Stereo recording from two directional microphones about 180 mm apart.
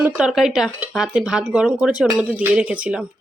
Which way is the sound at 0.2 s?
Centre (ahead or behind).